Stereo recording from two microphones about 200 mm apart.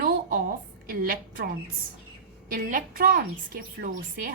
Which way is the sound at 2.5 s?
45° right (ahead or behind).